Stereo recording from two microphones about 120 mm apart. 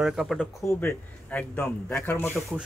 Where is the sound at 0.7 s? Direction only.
15° left (ahead or behind).